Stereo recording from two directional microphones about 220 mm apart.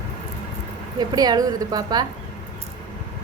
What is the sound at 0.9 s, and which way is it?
A woman's voice, 20° right (ahead or behind).